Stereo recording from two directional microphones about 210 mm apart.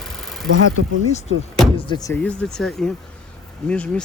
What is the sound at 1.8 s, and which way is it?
Speech, 20° left (ahead or behind).